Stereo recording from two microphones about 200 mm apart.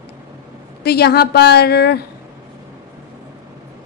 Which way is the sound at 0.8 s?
55° left (ahead or behind).